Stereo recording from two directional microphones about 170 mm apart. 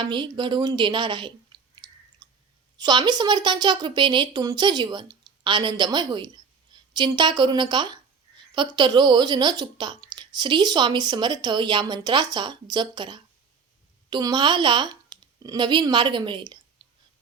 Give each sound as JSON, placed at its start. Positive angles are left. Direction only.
{"t": 0.0, "sound": "a woman's voice", "side_deg": -25}
{"t": 2.2, "sound": "chewing", "side_deg": -25}
{"t": 2.7, "sound": "a woman's voice", "side_deg": -25}